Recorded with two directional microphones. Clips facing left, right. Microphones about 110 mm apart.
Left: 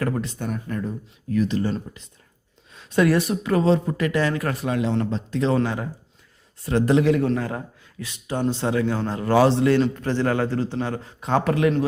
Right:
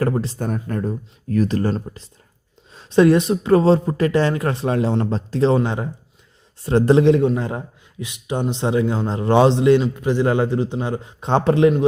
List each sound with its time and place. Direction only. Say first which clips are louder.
0.0 s speech: right 4 dB; 30° right (ahead or behind)
1.7 s a man's voice: right 3 dB; 35° right (ahead or behind)